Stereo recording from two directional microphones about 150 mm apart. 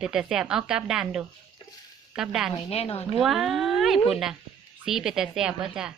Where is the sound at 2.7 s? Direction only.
40° left (ahead or behind).